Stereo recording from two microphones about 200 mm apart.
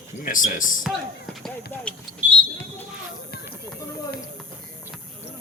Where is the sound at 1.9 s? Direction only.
5° left (ahead or behind).